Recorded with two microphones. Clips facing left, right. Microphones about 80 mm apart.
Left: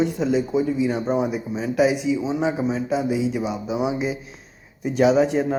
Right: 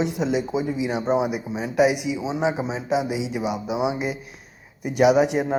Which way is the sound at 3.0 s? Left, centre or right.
Right.